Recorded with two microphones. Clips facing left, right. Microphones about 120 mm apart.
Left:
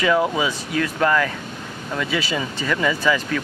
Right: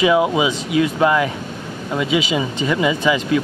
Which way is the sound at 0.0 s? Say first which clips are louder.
Right 4 dB; 15° right (ahead or behind).